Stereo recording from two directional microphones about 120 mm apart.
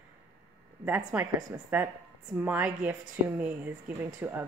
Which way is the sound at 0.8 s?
15° right (ahead or behind).